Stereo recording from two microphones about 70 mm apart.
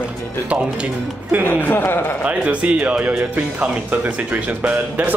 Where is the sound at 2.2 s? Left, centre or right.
Centre.